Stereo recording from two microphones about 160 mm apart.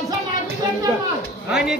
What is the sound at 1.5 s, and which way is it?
Speech, 5° right (ahead or behind).